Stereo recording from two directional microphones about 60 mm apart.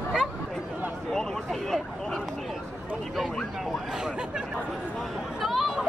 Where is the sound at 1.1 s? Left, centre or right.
Centre.